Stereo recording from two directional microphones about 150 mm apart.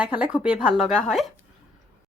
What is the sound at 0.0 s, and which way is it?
Speech, 10° right (ahead or behind).